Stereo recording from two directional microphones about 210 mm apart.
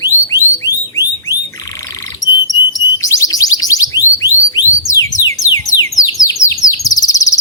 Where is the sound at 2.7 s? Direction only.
15° left (ahead or behind).